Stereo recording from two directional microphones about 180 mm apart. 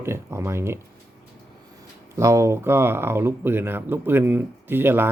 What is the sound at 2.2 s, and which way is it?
Speech, 15° right (ahead or behind).